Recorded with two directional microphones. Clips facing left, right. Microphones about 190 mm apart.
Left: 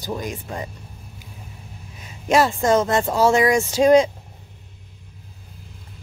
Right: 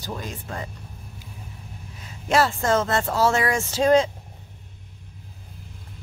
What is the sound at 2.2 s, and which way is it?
A woman's voice, 15° left (ahead or behind).